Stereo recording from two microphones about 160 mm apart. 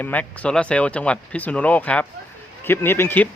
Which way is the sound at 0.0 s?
10° left (ahead or behind).